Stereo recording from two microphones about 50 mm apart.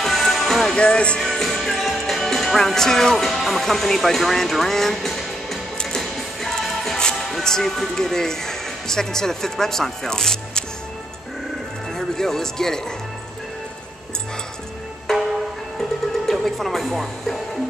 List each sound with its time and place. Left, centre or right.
0.0 s music: centre
0.7 s speech: left
1.2 s music: centre
7.2 s speech: centre
11.9 s speech: centre
15.1 s music: centre